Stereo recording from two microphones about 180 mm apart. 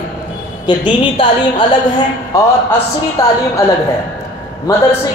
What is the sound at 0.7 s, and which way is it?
Speech, 25° left (ahead or behind).